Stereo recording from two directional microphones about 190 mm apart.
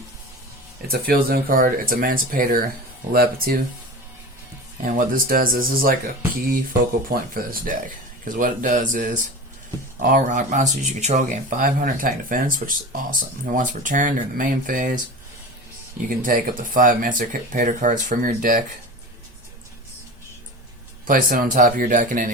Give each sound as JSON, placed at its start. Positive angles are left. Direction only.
{"t": 0.9, "sound": "speech", "side_deg": -55}
{"t": 4.8, "sound": "speech", "side_deg": -45}
{"t": 7.1, "sound": "speech", "side_deg": -50}
{"t": 16.0, "sound": "speech", "side_deg": -45}
{"t": 21.1, "sound": "speech", "side_deg": -45}